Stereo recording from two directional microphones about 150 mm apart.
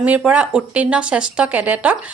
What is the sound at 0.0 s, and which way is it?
Speech, 10° right (ahead or behind).